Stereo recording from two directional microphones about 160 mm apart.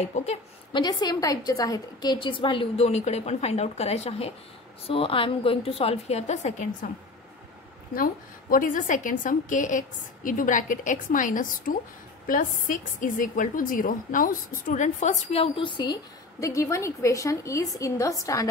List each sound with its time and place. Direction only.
0.0 s a woman's voice: 45° left (ahead or behind)
0.7 s a woman's voice: 25° left (ahead or behind); by 6.9 s 50° left (ahead or behind)
7.9 s a woman's voice: 65° left (ahead or behind); by 18.5 s 20° left (ahead or behind)